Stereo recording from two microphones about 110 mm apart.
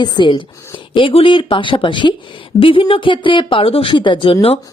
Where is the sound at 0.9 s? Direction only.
55° left (ahead or behind).